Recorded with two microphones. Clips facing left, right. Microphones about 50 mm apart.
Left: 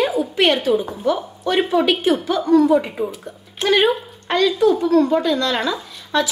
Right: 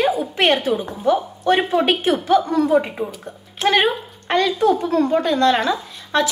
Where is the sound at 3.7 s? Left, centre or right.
Right.